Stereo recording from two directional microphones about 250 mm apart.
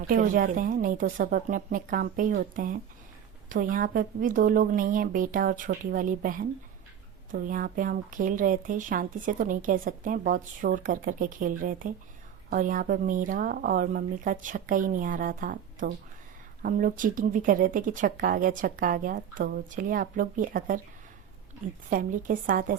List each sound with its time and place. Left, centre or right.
0.1 s speech: right
21.8 s speech: right